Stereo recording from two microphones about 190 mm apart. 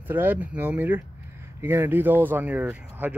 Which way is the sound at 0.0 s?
10° right (ahead or behind).